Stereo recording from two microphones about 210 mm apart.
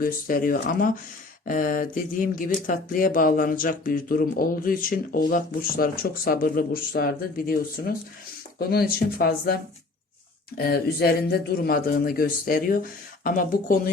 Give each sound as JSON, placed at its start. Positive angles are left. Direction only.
{"t": 0.0, "sound": "speech", "side_deg": 40}
{"t": 10.6, "sound": "speech", "side_deg": 50}